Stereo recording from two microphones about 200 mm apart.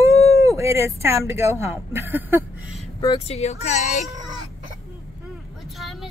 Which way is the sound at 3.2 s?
35° left (ahead or behind).